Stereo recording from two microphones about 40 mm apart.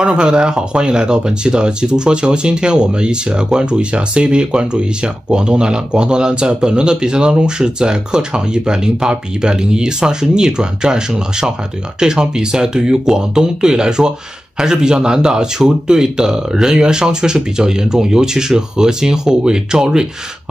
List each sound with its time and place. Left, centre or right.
0.0 s a man's voice: right